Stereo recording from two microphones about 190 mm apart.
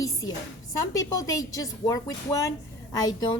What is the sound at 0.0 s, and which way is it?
A woman's voice, 20° left (ahead or behind).